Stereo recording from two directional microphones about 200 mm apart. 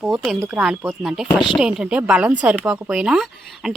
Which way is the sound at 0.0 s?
Centre (ahead or behind).